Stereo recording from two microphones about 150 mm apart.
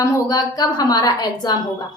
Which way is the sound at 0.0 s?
25° left (ahead or behind).